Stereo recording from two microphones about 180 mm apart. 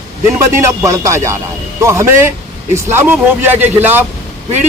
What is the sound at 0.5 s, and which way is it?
Speech, 15° right (ahead or behind).